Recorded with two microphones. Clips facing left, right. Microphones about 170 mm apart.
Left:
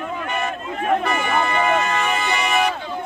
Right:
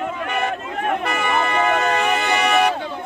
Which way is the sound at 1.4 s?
60° right (ahead or behind).